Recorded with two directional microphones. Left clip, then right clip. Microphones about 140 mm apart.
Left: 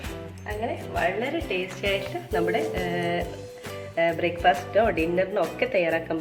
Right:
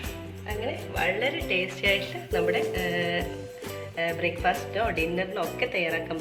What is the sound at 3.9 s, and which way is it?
Speech, 65° left (ahead or behind).